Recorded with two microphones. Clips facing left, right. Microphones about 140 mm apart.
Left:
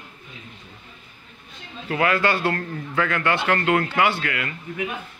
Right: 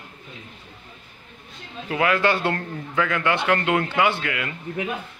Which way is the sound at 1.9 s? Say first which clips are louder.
Even; 10° right (ahead or behind).